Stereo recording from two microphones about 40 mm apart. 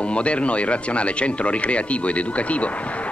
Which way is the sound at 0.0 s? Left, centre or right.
Left.